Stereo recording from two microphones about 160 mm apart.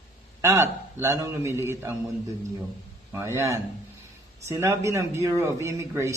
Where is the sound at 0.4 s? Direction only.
20° right (ahead or behind).